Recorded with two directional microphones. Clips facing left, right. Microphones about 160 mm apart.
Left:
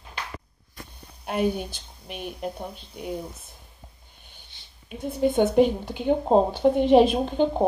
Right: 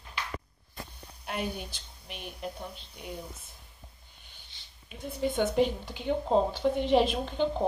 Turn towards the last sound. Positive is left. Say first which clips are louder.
# left 6 dB
turn(degrees=50)  # may be behind; listen again after turning